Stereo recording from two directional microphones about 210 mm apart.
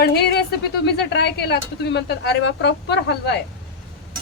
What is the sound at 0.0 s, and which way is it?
Speech, 50° left (ahead or behind).